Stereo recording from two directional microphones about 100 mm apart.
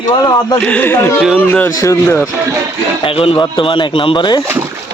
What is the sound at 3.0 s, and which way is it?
Speech, 65° left (ahead or behind).